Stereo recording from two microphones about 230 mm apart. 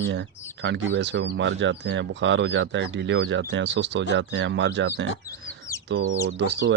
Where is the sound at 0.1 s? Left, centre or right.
Right.